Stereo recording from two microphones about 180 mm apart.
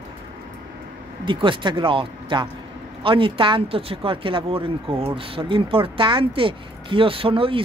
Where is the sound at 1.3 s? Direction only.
25° right (ahead or behind).